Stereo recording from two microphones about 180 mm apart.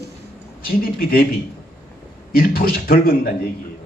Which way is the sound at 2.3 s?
55° left (ahead or behind).